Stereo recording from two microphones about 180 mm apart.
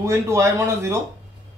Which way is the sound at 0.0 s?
15° right (ahead or behind).